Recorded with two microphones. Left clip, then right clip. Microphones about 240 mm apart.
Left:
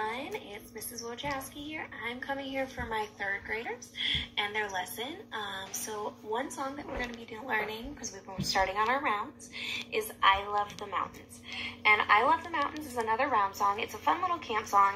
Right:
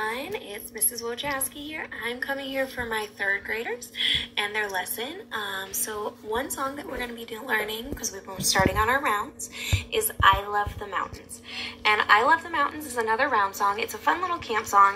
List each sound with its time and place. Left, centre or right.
0.0 s a sound: right
1.0 s a woman's voice: right
11.5 s a woman's voice: right